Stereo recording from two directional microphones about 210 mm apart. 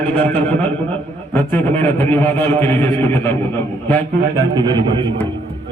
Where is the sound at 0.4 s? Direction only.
5° left (ahead or behind).